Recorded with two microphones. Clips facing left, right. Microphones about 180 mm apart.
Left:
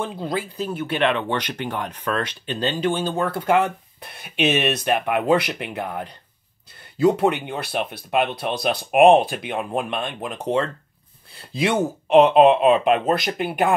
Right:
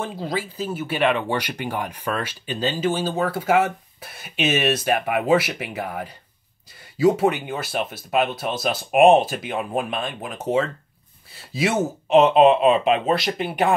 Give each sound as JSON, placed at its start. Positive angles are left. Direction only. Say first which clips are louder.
{"t": 0.0, "sound": "speech", "louder": "left 1 dB", "side_deg": 0}
{"t": 4.4, "sound": "speech", "louder": "left 2 dB", "side_deg": 60}
{"t": 4.7, "sound": "speech", "louder": "even", "side_deg": 0}
{"t": 7.4, "sound": "speech", "louder": "even", "side_deg": 0}